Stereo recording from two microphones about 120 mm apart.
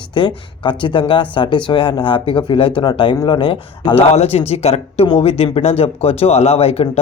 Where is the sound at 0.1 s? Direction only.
40° left (ahead or behind).